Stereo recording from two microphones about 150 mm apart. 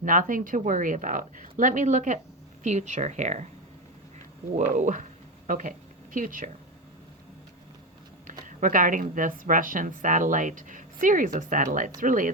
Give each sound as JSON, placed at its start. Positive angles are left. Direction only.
{"t": 0.0, "sound": "a woman's voice", "side_deg": -65}
{"t": 4.5, "sound": "a woman's voice", "side_deg": -55}
{"t": 8.4, "sound": "a woman's voice", "side_deg": -60}